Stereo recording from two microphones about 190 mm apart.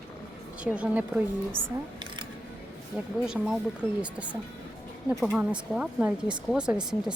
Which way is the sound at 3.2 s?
5° right (ahead or behind).